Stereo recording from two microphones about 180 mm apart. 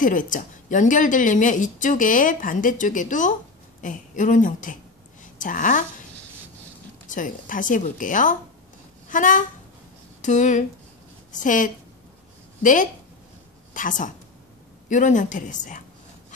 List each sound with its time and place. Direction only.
0.0 s a woman's voice: 50° left (ahead or behind)
7.1 s a woman's voice: 45° left (ahead or behind)
13.7 s a woman's voice: 45° left (ahead or behind)